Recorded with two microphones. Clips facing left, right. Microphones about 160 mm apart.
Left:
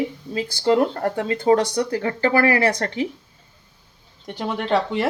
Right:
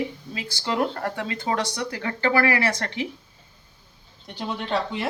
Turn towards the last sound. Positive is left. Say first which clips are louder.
# left 6 dB
turn(degrees=60)  # may be behind; listen again after turning